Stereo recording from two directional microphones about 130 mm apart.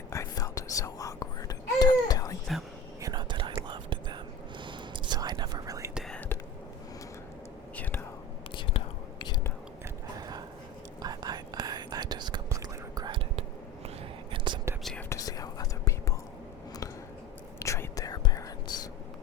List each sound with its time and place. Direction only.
0.1 s whispering: 25° left (ahead or behind)
3.0 s whispering: 35° right (ahead or behind)
5.9 s whispering: centre (ahead or behind)
6.1 s whispering: 15° left (ahead or behind)
8.5 s whispering: 40° left (ahead or behind)
10.2 s a sound: 30° right (ahead or behind)
11.0 s whispering: 30° right (ahead or behind)
13.1 s whispering: 40° right (ahead or behind)
15.1 s whispering: 30° left (ahead or behind)
17.6 s whispering: 25° left (ahead or behind)